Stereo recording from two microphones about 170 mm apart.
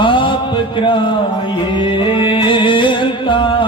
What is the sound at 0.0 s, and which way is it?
Music, 30° left (ahead or behind).